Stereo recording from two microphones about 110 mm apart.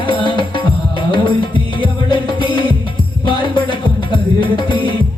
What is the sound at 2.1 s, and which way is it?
Music, 45° left (ahead or behind).